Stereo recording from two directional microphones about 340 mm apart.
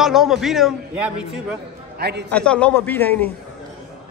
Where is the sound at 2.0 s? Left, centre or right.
Right.